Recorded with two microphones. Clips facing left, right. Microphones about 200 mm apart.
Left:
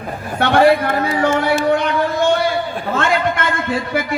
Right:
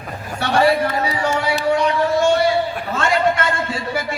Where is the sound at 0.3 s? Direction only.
55° left (ahead or behind).